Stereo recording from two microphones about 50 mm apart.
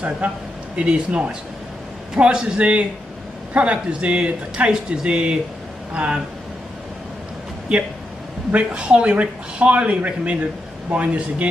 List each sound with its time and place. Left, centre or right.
0.7 s speech: right
8.5 s speech: right